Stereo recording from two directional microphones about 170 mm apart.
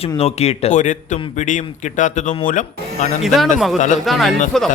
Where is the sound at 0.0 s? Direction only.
35° left (ahead or behind).